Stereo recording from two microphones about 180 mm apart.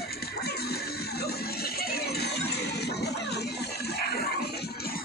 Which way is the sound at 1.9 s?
65° left (ahead or behind).